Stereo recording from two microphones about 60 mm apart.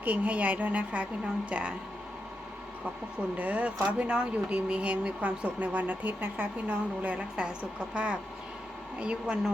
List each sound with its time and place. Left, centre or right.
0.0 s speech: right
3.3 s speech: right